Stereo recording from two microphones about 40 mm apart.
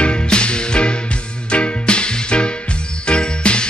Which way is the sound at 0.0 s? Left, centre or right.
Left.